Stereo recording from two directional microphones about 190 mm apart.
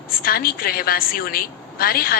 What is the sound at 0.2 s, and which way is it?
A woman's voice, 50° left (ahead or behind).